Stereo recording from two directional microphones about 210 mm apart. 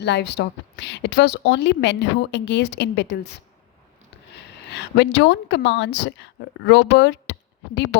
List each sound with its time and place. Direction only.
0.0 s a woman's voice: 55° left (ahead or behind)
4.7 s a woman's voice: 55° left (ahead or behind)